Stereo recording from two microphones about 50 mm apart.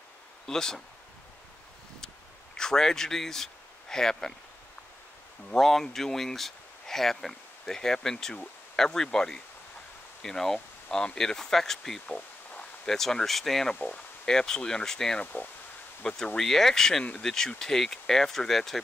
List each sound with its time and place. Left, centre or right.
0.5 s speech: centre
2.5 s speech: centre
5.5 s speech: centre
13.7 s speech: left
14.2 s speech: centre
16.3 s speech: centre